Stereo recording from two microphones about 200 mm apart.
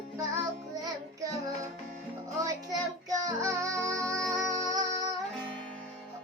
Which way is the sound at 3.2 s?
15° right (ahead or behind).